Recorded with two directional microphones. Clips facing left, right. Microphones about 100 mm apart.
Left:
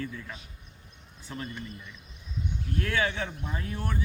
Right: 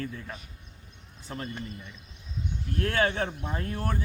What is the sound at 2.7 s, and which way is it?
A man's voice, 45° right (ahead or behind).